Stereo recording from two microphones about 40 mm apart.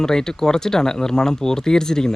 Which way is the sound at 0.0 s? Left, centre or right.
Centre.